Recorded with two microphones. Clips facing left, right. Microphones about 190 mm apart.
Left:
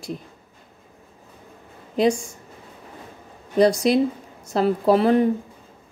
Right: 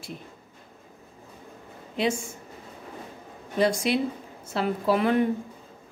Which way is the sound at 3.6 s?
40° left (ahead or behind).